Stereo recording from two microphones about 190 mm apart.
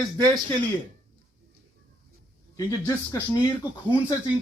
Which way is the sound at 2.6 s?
15° left (ahead or behind).